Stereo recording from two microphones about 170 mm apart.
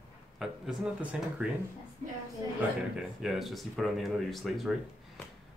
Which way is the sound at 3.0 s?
Centre (ahead or behind).